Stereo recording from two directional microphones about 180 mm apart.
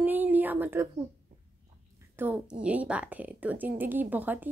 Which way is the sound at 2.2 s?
10° right (ahead or behind).